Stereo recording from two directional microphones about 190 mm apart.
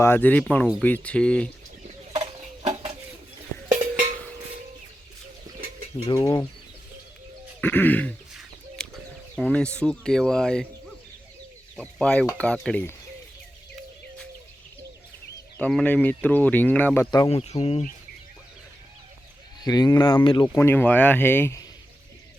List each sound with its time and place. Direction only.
0.0 s speech: 10° left (ahead or behind)
2.1 s a sound: 30° right (ahead or behind)
6.1 s speech: 20° left (ahead or behind)
7.6 s speech: 10° left (ahead or behind)
8.3 s chicken: centre (ahead or behind)
11.8 s speech: 5° left (ahead or behind)
15.5 s speech: 5° left (ahead or behind)
17.2 s speech: 30° left (ahead or behind)
19.6 s speech: 20° left (ahead or behind)
20.7 s speech: 10° left (ahead or behind)